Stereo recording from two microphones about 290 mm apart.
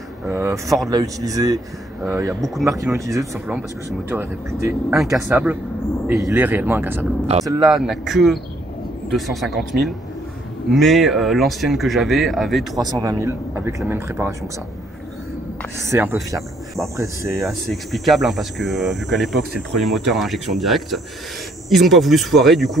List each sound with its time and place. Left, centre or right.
0.3 s speech: centre
7.6 s speech: centre
12.8 s speech: centre
15.9 s speech: centre
16.9 s speech: centre